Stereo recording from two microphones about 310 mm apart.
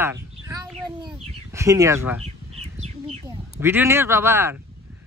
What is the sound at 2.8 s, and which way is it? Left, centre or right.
Bird, centre.